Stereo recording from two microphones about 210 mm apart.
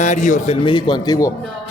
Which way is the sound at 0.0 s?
35° left (ahead or behind).